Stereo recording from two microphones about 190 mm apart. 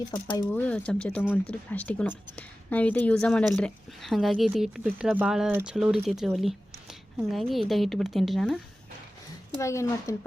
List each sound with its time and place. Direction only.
0.5 s a woman's voice: 10° left (ahead or behind)
9.6 s speech: 15° left (ahead or behind)